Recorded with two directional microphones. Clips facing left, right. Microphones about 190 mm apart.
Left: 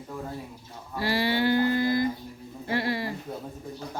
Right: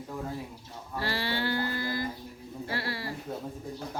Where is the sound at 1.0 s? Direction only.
15° left (ahead or behind).